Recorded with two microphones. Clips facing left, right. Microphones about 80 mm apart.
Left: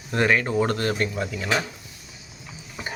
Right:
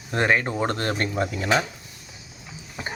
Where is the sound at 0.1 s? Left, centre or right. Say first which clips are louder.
Left 1 dB; right.